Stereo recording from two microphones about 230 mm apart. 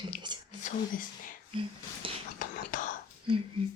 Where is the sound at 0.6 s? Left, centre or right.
Left.